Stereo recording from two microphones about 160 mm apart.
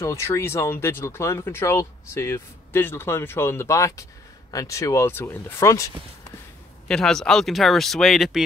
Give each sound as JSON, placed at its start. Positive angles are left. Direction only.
{"t": 0.0, "sound": "speech", "side_deg": 20}
{"t": 6.9, "sound": "speech", "side_deg": 5}